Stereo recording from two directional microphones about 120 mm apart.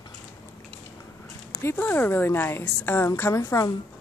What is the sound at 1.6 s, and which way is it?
A woman's voice, 15° left (ahead or behind).